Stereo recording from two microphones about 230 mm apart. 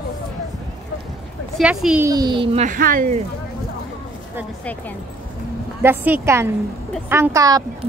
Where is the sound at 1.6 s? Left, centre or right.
Centre; by 3.1 s right.